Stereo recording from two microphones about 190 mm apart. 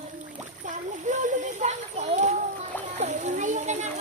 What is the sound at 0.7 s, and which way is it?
Splash, 40° right (ahead or behind).